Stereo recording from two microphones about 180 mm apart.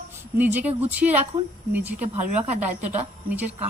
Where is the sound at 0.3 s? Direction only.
10° right (ahead or behind).